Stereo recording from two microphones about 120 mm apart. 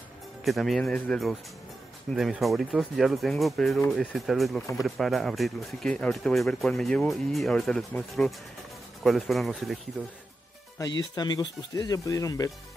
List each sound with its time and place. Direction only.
0.5 s speech: centre (ahead or behind)
0.9 s speech: 10° left (ahead or behind)
2.1 s speech: centre (ahead or behind)
9.0 s speech: centre (ahead or behind)
10.8 s speech: 35° left (ahead or behind)